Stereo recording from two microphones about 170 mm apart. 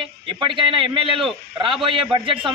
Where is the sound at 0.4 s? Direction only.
30° right (ahead or behind).